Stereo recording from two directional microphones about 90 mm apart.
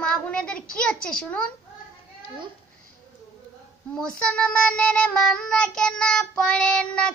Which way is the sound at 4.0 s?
10° left (ahead or behind).